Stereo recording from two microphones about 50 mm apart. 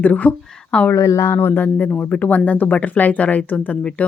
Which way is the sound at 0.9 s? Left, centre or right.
Left.